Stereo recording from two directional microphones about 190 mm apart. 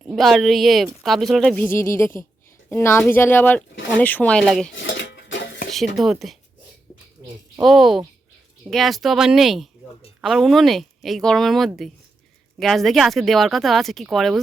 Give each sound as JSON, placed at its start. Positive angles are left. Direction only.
{"t": 0.0, "sound": "a woman's voice", "side_deg": 0}
{"t": 4.7, "sound": "dishes", "side_deg": 80}
{"t": 6.0, "sound": "speech", "side_deg": 0}
{"t": 7.6, "sound": "speech", "side_deg": 0}